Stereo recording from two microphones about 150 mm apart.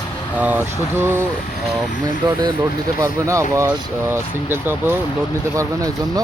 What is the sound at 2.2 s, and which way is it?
Speech, 30° right (ahead or behind).